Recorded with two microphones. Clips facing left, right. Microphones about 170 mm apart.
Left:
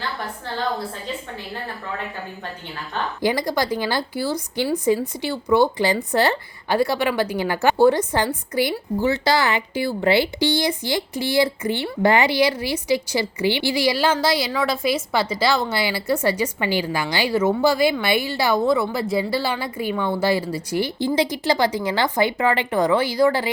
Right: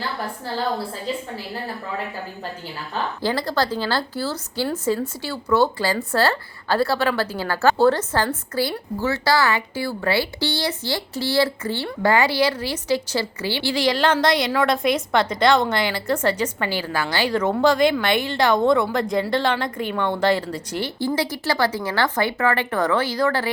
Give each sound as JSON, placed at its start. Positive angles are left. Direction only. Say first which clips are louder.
{"t": 3.2, "sound": "speech", "louder": "left 2 dB", "side_deg": 15}